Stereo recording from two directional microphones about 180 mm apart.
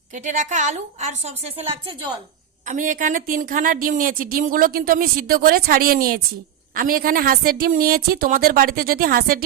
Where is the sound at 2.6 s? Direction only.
45° right (ahead or behind).